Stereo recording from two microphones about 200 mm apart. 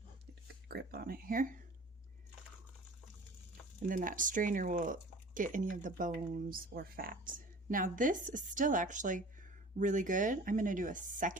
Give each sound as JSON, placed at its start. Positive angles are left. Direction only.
{"t": 0.7, "sound": "speech", "side_deg": -50}
{"t": 3.8, "sound": "speech", "side_deg": -45}